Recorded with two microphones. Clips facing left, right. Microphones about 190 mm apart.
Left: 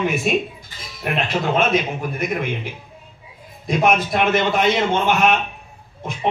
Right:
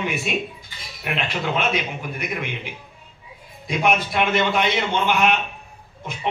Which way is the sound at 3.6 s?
45° left (ahead or behind).